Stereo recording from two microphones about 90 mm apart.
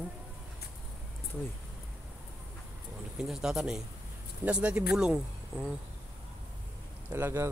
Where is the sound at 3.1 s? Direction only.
5° right (ahead or behind).